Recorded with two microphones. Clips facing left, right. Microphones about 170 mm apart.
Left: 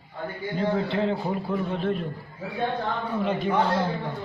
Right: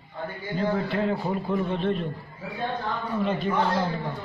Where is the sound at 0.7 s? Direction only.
20° left (ahead or behind).